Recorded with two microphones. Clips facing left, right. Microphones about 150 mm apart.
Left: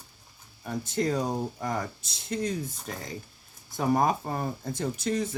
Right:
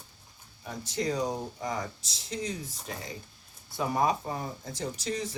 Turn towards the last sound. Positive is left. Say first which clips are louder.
# left 5 dB
turn(degrees=55)  # may be behind; listen again after turning